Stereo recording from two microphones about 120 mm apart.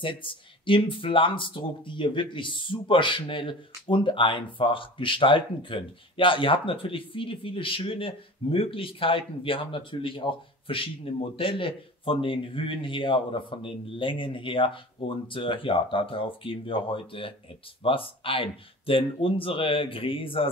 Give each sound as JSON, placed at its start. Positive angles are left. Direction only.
{"t": 0.0, "sound": "speech", "side_deg": 45}